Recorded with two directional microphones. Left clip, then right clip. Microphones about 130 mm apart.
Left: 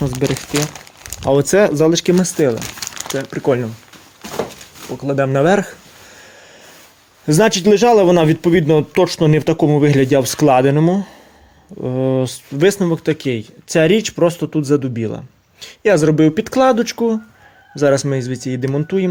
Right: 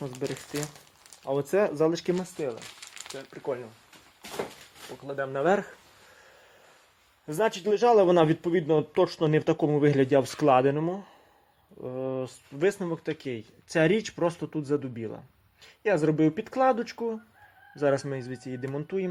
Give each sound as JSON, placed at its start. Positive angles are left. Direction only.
{"t": 1.2, "sound": "speech", "side_deg": 45}
{"t": 1.5, "sound": "speech", "side_deg": 25}
{"t": 2.2, "sound": "speech", "side_deg": 35}
{"t": 3.3, "sound": "speech", "side_deg": 55}
{"t": 4.9, "sound": "speech", "side_deg": 35}
{"t": 7.3, "sound": "speech", "side_deg": 25}